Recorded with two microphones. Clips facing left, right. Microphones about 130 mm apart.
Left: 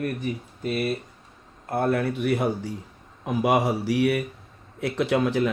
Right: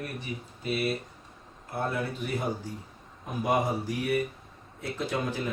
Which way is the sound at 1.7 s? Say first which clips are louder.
Left 8 dB; 65° left (ahead or behind).